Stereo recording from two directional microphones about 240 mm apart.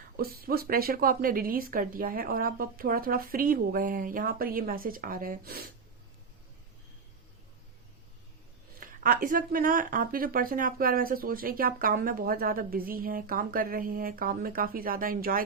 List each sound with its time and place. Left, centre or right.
0.2 s speech: right
8.8 s speech: right